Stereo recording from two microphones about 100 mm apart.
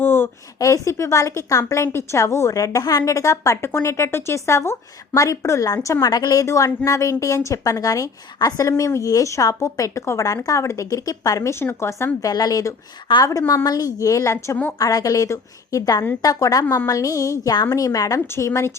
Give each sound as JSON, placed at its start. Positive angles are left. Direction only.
{"t": 0.0, "sound": "a sound", "side_deg": 20}
{"t": 0.6, "sound": "a woman's voice", "side_deg": 30}
{"t": 13.1, "sound": "a woman's voice", "side_deg": 55}
{"t": 13.7, "sound": "a woman's voice", "side_deg": 40}